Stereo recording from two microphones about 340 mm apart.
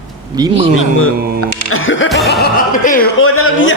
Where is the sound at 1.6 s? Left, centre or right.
Left.